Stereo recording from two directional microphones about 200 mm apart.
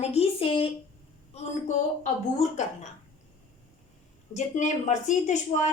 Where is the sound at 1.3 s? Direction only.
30° left (ahead or behind).